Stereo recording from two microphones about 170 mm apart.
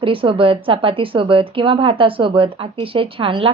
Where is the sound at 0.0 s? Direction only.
30° right (ahead or behind).